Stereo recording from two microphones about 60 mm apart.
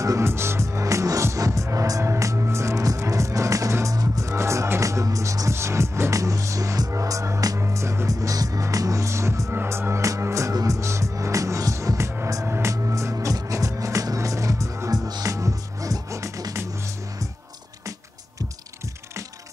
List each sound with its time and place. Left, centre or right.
0.2 s music: right
5.5 s music: right
7.5 s music: right
8.1 s music: right
8.6 s music: right
9.5 s music: right
12.4 s music: right
12.7 s music: right
16.5 s music: right